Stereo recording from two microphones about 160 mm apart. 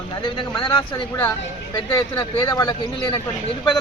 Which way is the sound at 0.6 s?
30° left (ahead or behind).